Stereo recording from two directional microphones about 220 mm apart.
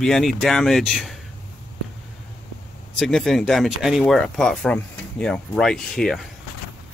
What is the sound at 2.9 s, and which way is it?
Speech, centre (ahead or behind).